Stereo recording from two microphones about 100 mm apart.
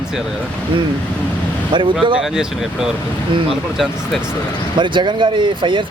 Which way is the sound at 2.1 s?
5° right (ahead or behind).